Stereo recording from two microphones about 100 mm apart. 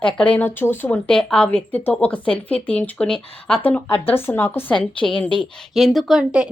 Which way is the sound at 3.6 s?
20° left (ahead or behind).